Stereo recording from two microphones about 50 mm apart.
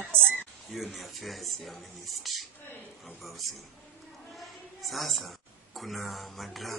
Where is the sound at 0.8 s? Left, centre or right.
Centre.